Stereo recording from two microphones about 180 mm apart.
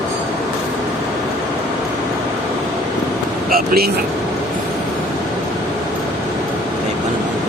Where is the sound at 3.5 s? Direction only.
55° right (ahead or behind).